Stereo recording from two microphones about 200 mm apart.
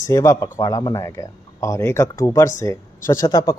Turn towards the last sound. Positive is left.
turn(degrees=20)  # may be behind; listen again after turning